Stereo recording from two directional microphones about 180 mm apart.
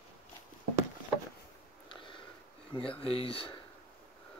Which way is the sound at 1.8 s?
30° left (ahead or behind).